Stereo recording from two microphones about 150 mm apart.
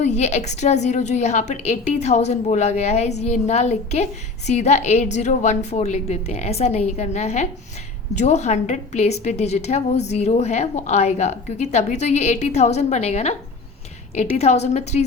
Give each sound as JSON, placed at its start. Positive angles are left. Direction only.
{"t": 0.0, "sound": "a woman's voice", "side_deg": 50}